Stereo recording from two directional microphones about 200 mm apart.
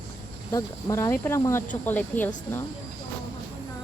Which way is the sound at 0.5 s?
15° left (ahead or behind).